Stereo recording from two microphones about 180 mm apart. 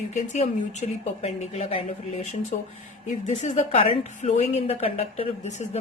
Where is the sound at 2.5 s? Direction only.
50° left (ahead or behind).